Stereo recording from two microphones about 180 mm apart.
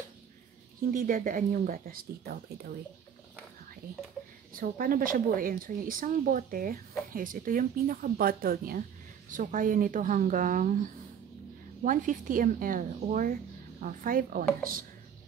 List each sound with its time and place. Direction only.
0.9 s a woman's voice: 50° right (ahead or behind)
4.6 s a woman's voice: 50° right (ahead or behind)
11.8 s a woman's voice: 45° right (ahead or behind)